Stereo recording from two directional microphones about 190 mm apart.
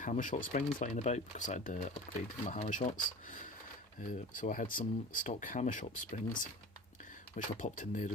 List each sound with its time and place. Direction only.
0.0 s speech: 40° left (ahead or behind)
7.3 s speech: 40° left (ahead or behind)